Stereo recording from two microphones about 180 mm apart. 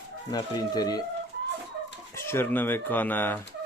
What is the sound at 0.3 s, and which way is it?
Speech, 20° left (ahead or behind).